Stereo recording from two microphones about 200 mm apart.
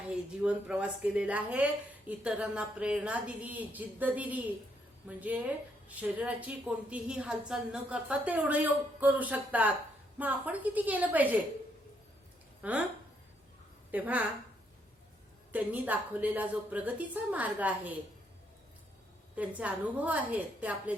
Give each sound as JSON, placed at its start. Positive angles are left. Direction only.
{"t": 0.1, "sound": "speech", "side_deg": -5}
{"t": 12.6, "sound": "speech", "side_deg": -5}
{"t": 13.9, "sound": "speech", "side_deg": -10}
{"t": 15.5, "sound": "speech", "side_deg": -10}
{"t": 19.4, "sound": "speech", "side_deg": -5}